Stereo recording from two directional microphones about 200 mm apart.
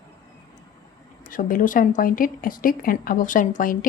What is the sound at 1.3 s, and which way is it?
A woman's voice, 45° left (ahead or behind).